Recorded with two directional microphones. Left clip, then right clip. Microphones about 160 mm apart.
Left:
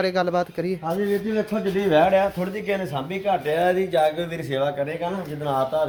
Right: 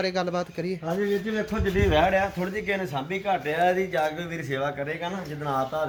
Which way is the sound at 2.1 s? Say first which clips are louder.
Left 4 dB; 55° left (ahead or behind).